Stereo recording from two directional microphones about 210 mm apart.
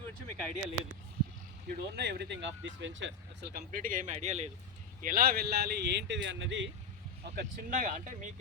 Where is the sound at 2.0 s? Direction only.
50° right (ahead or behind); by 4.5 s 30° right (ahead or behind).